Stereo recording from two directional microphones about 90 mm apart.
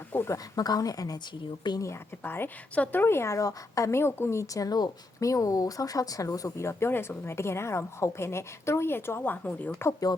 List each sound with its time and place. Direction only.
0.3 s a woman's voice: 45° left (ahead or behind)
1.8 s a woman's voice: 25° left (ahead or behind)
10.1 s a woman's voice: 50° left (ahead or behind)